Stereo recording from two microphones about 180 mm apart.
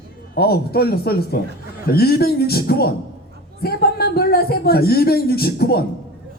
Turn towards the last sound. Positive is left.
turn(degrees=60)  # may be behind; listen again after turning